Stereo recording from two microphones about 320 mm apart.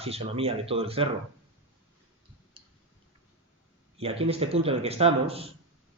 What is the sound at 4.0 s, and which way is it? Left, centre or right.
Speech, centre.